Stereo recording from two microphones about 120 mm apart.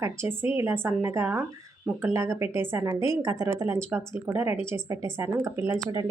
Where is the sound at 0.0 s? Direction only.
20° right (ahead or behind).